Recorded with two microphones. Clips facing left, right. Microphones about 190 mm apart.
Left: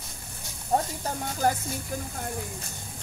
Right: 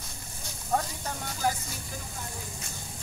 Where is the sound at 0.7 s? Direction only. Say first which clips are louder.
Left 3 dB; 30° left (ahead or behind).